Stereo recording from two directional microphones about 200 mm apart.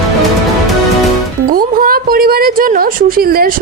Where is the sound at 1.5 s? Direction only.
45° right (ahead or behind).